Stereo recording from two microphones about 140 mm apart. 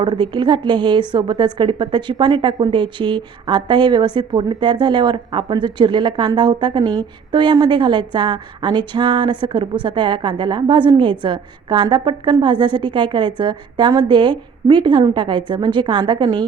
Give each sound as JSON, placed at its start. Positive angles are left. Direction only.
{"t": 0.0, "sound": "a woman's voice", "side_deg": -35}